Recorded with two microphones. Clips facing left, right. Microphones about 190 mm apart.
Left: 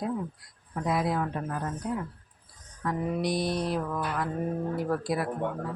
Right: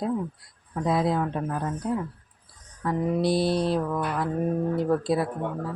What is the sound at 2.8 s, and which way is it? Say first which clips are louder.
Speech: right 5 dB; 25° right (ahead or behind).